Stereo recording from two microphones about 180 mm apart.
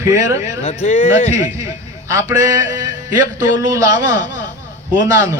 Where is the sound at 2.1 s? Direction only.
20° right (ahead or behind).